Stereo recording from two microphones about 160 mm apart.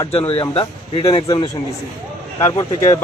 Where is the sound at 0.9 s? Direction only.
35° left (ahead or behind).